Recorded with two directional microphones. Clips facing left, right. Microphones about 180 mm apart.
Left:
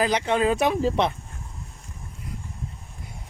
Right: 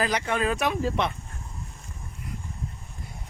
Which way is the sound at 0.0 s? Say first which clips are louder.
Left 4 dB; 20° left (ahead or behind).